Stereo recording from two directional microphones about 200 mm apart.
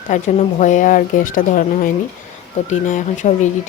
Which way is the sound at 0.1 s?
35° left (ahead or behind).